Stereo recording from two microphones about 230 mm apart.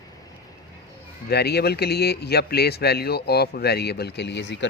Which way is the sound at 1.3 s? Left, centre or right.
Left.